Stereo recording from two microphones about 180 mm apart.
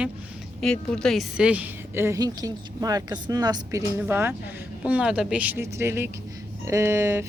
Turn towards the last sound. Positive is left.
turn(degrees=-15)  # may be behind; listen again after turning